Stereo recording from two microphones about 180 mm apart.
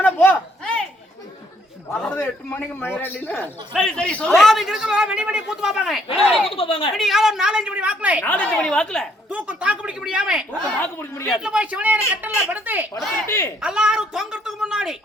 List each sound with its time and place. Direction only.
0.0 s a sound: 10° left (ahead or behind)
1.9 s a man's voice: 10° left (ahead or behind)
3.7 s a man's voice: 5° right (ahead or behind)
3.9 s a man's voice: 5° left (ahead or behind)
6.5 s speech: 30° left (ahead or behind)
6.9 s a man's voice: centre (ahead or behind)
8.2 s a man's voice: 10° left (ahead or behind)
9.3 s a man's voice: 5° right (ahead or behind)
10.8 s a man's voice: 10° left (ahead or behind)
11.3 s speech: 5° right (ahead or behind)
13.2 s a man's voice: 15° left (ahead or behind)
13.6 s a man's voice: 5° right (ahead or behind)